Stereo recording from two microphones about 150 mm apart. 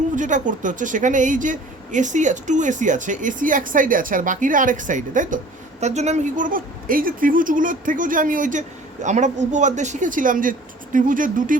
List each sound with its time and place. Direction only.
0.2 s speech: 55° right (ahead or behind)
5.8 s speech: 50° right (ahead or behind)